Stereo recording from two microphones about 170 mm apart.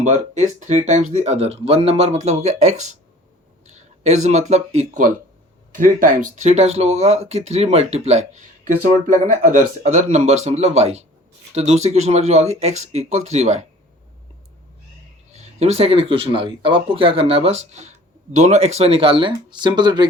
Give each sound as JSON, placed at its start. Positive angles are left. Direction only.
{"t": 0.0, "sound": "speech", "side_deg": -45}
{"t": 15.3, "sound": "speech", "side_deg": -40}